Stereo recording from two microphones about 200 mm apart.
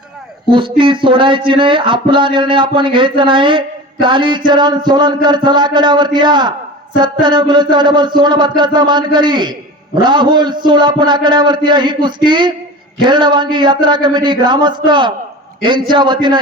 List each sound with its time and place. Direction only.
0.5 s music: 25° right (ahead or behind)